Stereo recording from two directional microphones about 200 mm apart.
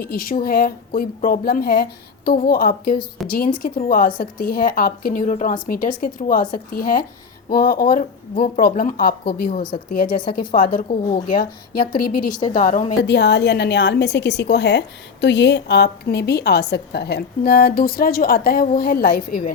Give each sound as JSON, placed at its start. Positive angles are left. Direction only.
{"t": 0.0, "sound": "a woman's voice", "side_deg": 45}
{"t": 12.5, "sound": "a woman's voice", "side_deg": 40}
{"t": 13.0, "sound": "a woman's voice", "side_deg": 60}